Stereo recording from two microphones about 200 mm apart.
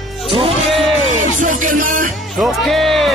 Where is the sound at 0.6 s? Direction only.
Centre (ahead or behind).